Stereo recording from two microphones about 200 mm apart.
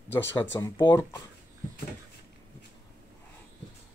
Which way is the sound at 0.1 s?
10° left (ahead or behind).